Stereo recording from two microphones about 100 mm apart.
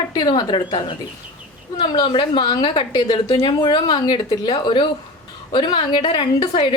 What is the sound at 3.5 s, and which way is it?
A woman's voice, 45° left (ahead or behind).